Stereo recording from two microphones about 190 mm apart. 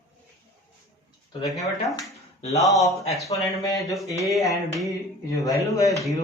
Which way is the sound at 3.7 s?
20° left (ahead or behind).